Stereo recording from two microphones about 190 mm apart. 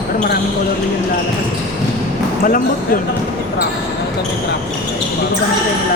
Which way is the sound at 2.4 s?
45° left (ahead or behind).